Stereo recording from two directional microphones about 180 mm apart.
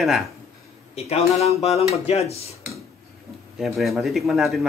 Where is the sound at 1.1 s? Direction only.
35° left (ahead or behind).